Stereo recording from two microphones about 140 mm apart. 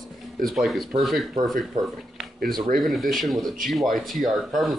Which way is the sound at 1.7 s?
70° right (ahead or behind).